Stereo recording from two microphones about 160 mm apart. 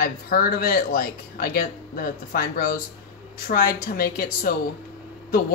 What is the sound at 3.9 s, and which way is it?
Speech, 65° left (ahead or behind).